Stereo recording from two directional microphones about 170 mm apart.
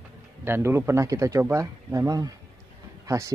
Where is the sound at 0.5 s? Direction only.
15° right (ahead or behind).